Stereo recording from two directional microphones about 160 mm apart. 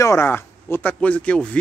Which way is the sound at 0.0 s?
15° left (ahead or behind).